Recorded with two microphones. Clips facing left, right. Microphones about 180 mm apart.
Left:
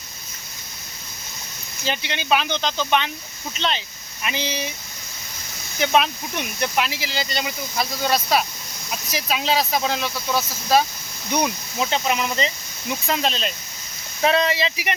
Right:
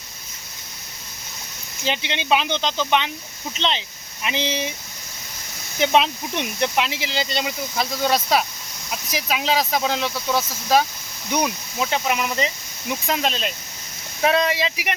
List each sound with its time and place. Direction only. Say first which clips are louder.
1.8 s speech: right 1 dB; 20° right (ahead or behind)
5.8 s speech: right 1 dB; 25° right (ahead or behind)
11.3 s speech: even; centre (ahead or behind)